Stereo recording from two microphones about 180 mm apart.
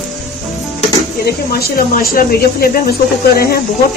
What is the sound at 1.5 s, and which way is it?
Speech, 55° left (ahead or behind).